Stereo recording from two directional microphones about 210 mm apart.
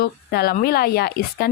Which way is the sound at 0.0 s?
50° left (ahead or behind).